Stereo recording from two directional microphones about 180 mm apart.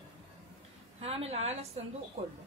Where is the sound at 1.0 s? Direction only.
35° right (ahead or behind).